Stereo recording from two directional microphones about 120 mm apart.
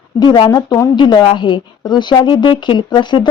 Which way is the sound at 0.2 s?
40° left (ahead or behind).